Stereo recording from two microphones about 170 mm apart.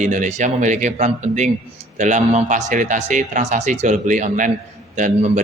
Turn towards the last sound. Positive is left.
turn(degrees=-45)  # may be behind; listen again after turning